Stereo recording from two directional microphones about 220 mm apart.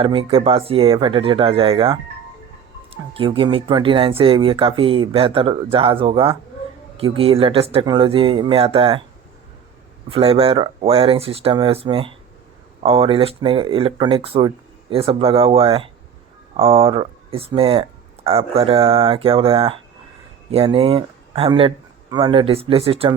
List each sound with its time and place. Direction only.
0.0 s speech: 25° right (ahead or behind)
10.1 s speech: 25° right (ahead or behind)